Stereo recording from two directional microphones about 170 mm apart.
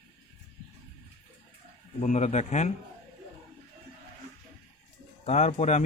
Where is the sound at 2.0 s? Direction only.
40° left (ahead or behind).